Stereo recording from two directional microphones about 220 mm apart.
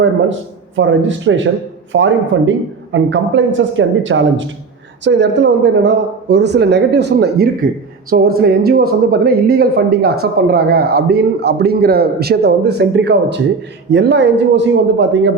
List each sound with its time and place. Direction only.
0.8 s speech: 60° right (ahead or behind)